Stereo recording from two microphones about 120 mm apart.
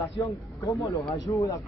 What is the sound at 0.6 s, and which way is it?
Speech, 25° left (ahead or behind).